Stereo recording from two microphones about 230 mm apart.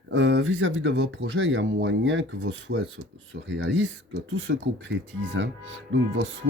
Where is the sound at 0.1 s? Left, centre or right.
Right.